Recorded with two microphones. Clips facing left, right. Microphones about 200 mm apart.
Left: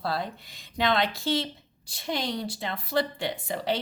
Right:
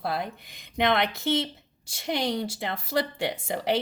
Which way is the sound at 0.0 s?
20° right (ahead or behind).